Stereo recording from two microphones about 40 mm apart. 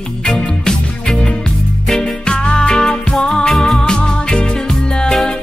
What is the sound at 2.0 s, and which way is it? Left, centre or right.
Music, left.